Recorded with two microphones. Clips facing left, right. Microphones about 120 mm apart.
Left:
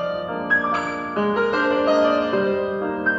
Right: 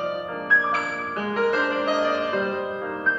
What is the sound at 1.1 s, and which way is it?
Music, 30° left (ahead or behind).